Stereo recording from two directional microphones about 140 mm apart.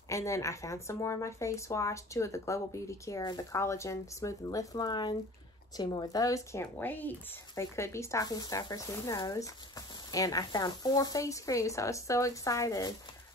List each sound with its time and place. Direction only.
0.1 s a woman's voice: 20° left (ahead or behind)